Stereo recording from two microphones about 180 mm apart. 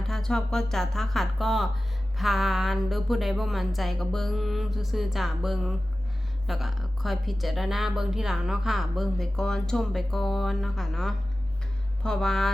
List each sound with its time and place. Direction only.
0.1 s speech: 5° left (ahead or behind)